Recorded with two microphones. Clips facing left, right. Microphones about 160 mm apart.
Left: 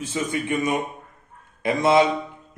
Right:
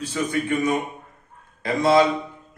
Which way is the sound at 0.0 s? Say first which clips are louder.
Right 2 dB; 20° left (ahead or behind).